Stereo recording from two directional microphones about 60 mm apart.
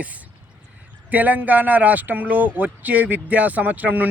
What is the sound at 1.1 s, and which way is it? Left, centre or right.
Speech, right.